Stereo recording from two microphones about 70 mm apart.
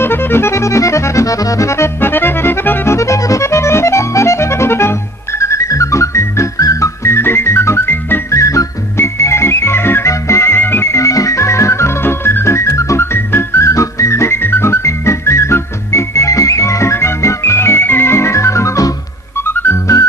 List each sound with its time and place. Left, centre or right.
0.0 s accordion: left
2.9 s accordion: left
5.4 s music: left
8.3 s music: left
9.0 s organ: left
10.1 s music: left
10.9 s organ: left
13.1 s music: left
19.5 s music: left